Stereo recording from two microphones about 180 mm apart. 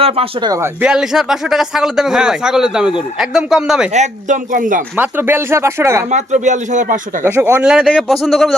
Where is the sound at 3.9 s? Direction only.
40° right (ahead or behind).